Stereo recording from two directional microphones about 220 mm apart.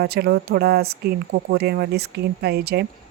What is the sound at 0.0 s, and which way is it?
Speech, 45° right (ahead or behind).